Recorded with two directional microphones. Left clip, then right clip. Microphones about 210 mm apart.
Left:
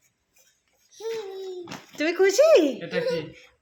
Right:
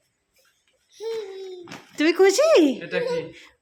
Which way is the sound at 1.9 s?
30° right (ahead or behind).